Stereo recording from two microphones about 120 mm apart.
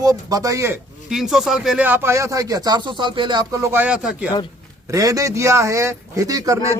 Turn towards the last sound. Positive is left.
turn(degrees=-30)  # may be behind; listen again after turning